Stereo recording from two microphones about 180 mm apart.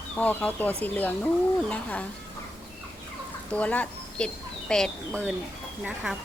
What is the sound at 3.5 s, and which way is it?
Speech, 5° left (ahead or behind).